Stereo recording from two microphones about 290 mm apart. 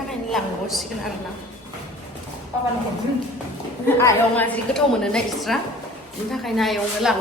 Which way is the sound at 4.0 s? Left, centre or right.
Centre.